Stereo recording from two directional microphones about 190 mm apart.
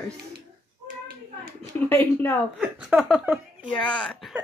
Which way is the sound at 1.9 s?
10° left (ahead or behind).